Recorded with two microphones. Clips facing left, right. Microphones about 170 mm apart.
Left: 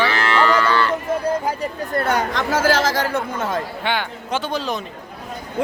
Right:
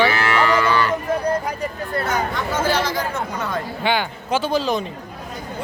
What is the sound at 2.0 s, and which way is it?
Speech, 60° left (ahead or behind).